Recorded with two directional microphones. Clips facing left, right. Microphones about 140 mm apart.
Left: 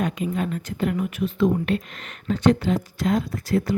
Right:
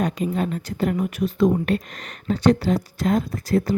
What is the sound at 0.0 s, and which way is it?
Speech, 35° right (ahead or behind).